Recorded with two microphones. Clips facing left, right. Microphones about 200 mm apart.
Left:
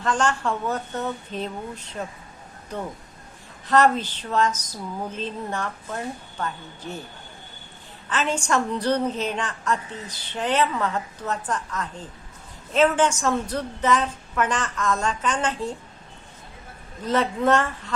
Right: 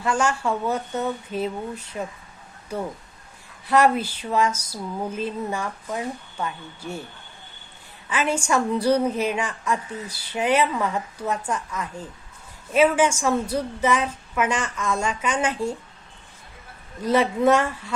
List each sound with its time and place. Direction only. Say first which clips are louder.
0.0 s a woman's voice: right 1 dB; 10° right (ahead or behind)
3.7 s a woman's voice: even; 10° right (ahead or behind)
8.1 s a woman's voice: right 1 dB; 10° right (ahead or behind)
17.0 s a woman's voice: right 3 dB; 10° right (ahead or behind)